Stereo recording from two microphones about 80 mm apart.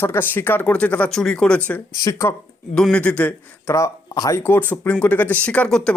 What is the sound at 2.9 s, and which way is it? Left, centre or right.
Speech, centre.